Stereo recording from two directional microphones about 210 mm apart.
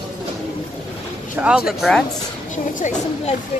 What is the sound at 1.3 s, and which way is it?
Speech, 5° right (ahead or behind).